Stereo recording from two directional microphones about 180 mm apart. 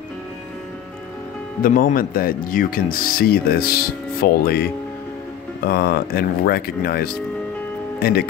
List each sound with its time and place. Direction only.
1.6 s speech: 50° left (ahead or behind)
5.7 s speech: 55° left (ahead or behind)